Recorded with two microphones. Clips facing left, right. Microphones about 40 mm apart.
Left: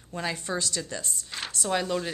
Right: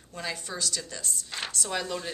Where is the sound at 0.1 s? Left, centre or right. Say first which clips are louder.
Left 5 dB; centre.